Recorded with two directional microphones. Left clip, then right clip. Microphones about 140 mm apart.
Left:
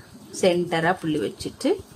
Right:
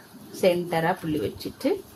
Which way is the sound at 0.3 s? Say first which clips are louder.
Left 1 dB; 25° left (ahead or behind).